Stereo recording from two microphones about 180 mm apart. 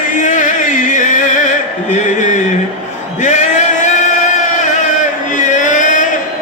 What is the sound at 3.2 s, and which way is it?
Male singing, 40° left (ahead or behind).